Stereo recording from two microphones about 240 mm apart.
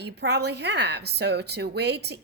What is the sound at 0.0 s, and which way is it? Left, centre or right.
Speech, right.